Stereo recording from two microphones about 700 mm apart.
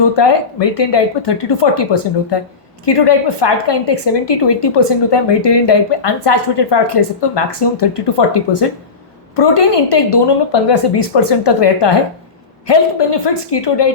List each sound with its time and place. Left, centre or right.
0.0 s a woman's voice: left